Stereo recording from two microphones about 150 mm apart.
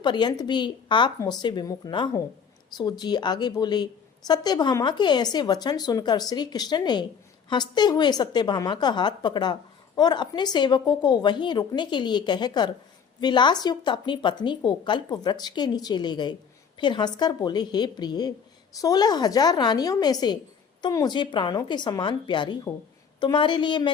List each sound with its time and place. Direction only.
0.0 s a woman's voice: 30° left (ahead or behind)